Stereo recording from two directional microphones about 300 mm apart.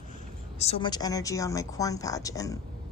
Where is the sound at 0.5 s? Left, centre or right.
Centre.